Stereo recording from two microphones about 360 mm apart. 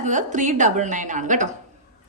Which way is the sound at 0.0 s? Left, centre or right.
Centre.